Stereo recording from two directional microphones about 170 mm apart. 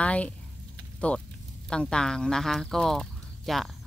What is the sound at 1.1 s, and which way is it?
Speech, 10° left (ahead or behind).